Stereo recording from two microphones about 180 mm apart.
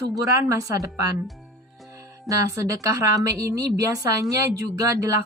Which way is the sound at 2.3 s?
20° right (ahead or behind).